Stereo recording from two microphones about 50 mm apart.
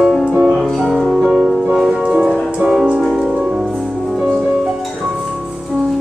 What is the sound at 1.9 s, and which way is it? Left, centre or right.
Music, centre.